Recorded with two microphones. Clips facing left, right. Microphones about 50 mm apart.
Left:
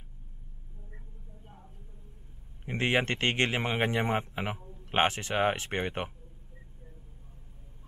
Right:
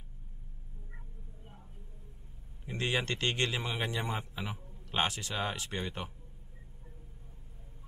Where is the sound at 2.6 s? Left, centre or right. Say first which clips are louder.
Left 5 dB; left.